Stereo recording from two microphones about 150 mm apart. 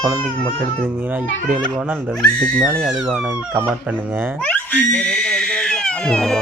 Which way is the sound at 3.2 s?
15° right (ahead or behind).